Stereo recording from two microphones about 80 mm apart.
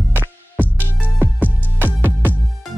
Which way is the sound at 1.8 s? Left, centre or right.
Right.